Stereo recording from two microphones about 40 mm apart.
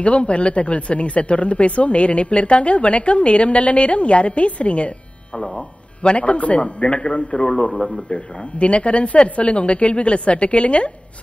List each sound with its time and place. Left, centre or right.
0.0 s speech: left
8.1 s speech: left